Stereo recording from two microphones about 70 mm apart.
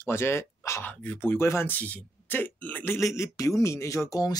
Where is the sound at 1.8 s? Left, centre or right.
Left.